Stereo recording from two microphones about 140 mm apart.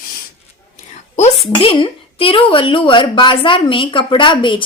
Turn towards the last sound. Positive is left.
turn(degrees=35)  # may be behind; listen again after turning